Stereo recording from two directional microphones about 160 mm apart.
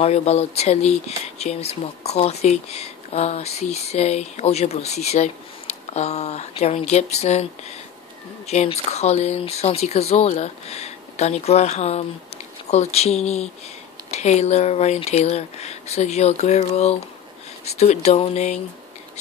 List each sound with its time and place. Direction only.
0.0 s speech: 40° left (ahead or behind)
8.5 s speech: 45° left (ahead or behind)